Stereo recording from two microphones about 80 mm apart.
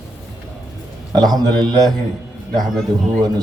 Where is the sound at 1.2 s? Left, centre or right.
Right.